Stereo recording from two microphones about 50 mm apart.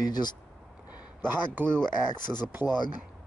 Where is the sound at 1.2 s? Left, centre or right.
Right.